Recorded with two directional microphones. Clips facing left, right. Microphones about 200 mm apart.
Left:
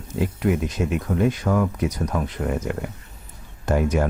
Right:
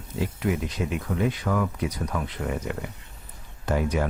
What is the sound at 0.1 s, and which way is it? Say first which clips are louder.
Speech: left 4 dB; 50° left (ahead or behind).